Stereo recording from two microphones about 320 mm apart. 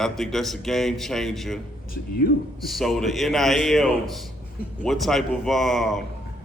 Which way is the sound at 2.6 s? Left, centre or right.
Centre.